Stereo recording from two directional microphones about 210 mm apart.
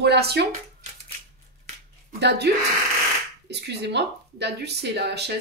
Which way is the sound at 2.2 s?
50° right (ahead or behind).